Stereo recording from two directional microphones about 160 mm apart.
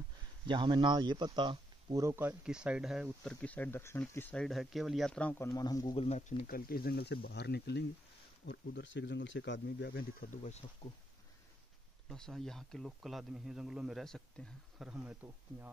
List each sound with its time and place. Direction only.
0.5 s speech: 30° right (ahead or behind)
2.4 s speech: 5° right (ahead or behind)
5.4 s speech: 20° left (ahead or behind)
5.9 s speech: 45° left (ahead or behind); by 10.3 s 75° left (ahead or behind)
10.3 s speech: 45° left (ahead or behind)
12.1 s speech: centre (ahead or behind)
14.9 s speech: 5° right (ahead or behind)